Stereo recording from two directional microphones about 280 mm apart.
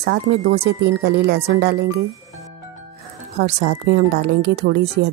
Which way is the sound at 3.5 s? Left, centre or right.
Right.